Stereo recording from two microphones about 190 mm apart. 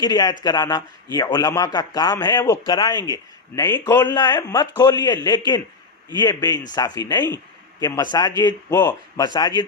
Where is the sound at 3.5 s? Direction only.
20° left (ahead or behind).